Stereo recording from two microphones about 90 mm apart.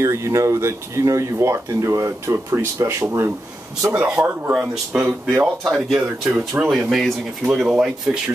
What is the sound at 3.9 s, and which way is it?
Speech, 15° right (ahead or behind).